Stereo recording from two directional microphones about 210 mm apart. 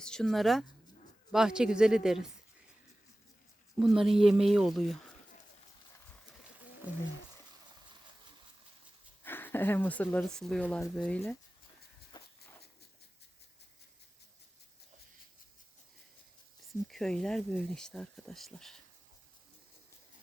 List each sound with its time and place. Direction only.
0.0 s speech: 5° left (ahead or behind)
3.8 s speech: centre (ahead or behind)
9.2 s speech: 10° left (ahead or behind)
12.1 s a sound: 20° left (ahead or behind)
16.9 s speech: centre (ahead or behind)